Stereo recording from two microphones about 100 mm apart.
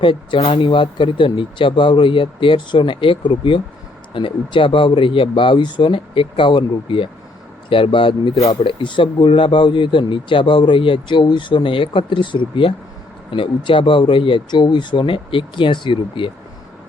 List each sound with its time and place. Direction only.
0.0 s speech: 55° left (ahead or behind)
0.6 s speech: 55° left (ahead or behind)